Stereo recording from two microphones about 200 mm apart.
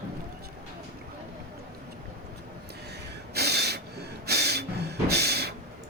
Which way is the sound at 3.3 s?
55° right (ahead or behind).